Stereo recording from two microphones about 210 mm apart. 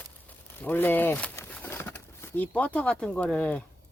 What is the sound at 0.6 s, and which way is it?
Bird, 10° left (ahead or behind).